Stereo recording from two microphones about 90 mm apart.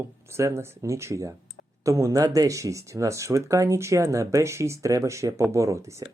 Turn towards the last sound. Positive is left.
turn(degrees=-35)  # may be behind; listen again after turning